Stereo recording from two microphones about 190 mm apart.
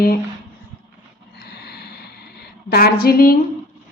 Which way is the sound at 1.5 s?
55° left (ahead or behind).